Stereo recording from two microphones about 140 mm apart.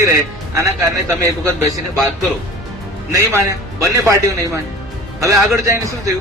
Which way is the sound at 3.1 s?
20° right (ahead or behind).